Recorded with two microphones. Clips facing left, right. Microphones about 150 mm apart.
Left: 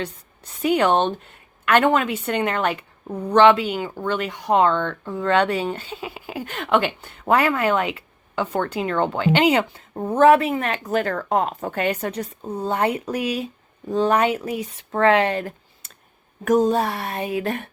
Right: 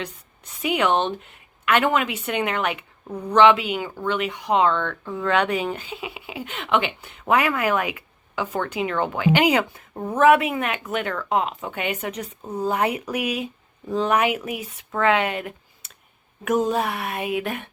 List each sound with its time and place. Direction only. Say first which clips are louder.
0.6 s a woman's voice: left 3 dB; 35° left (ahead or behind)
6.3 s a woman's voice: left 3 dB; 45° left (ahead or behind)
12.4 s speech: even; centre (ahead or behind)
12.6 s a woman's voice: left 1 dB; 30° left (ahead or behind)